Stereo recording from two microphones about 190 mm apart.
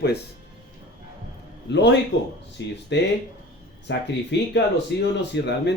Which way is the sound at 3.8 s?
65° left (ahead or behind).